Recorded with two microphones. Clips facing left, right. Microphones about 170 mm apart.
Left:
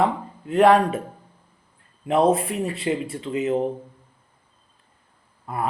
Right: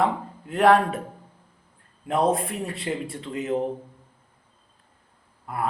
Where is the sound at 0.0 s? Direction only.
Centre (ahead or behind).